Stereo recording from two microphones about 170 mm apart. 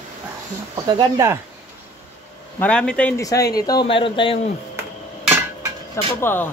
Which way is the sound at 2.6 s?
5° left (ahead or behind).